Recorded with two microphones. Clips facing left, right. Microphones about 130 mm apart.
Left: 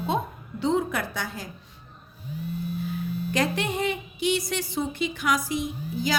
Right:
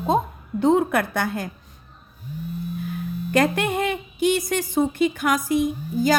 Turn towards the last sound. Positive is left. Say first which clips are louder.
# right 7 dB
turn(degrees=-50)  # may be behind; listen again after turning